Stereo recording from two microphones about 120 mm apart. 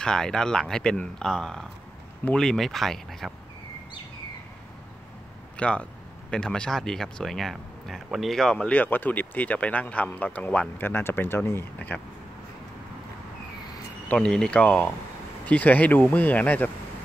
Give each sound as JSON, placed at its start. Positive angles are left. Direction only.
{"t": 0.0, "sound": "speech", "side_deg": 5}
{"t": 5.6, "sound": "speech", "side_deg": 10}
{"t": 14.0, "sound": "speech", "side_deg": 10}